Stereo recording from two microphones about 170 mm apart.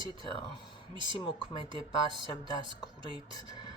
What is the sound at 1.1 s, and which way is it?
Speech, 30° left (ahead or behind).